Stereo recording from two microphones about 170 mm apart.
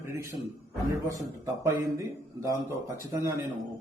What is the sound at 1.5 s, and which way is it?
A man's voice, 15° right (ahead or behind).